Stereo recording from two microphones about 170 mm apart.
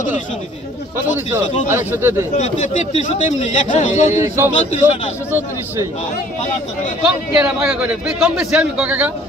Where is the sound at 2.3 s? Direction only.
45° left (ahead or behind).